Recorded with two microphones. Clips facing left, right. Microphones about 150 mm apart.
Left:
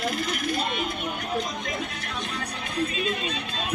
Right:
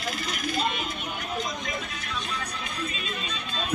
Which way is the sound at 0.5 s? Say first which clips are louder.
Right 2 dB; 60° left (ahead or behind).